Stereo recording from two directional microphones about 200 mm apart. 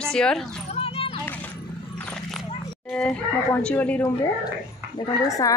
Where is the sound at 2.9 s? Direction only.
5° left (ahead or behind).